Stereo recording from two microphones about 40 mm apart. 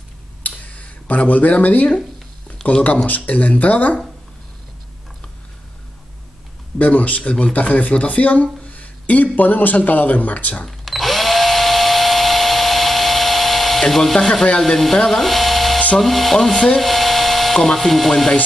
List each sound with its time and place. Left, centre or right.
0.4 s a sound: left
2.6 s a sound: centre
3.1 s speech: left
6.8 s speech: left
10.9 s drill: centre
15.0 s electric toothbrush: centre
16.0 s speech: centre
16.5 s speech: centre
16.8 s dental drill: centre
17.7 s speech: centre